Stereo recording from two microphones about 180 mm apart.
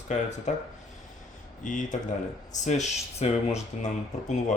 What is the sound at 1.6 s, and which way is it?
Speech, 45° left (ahead or behind).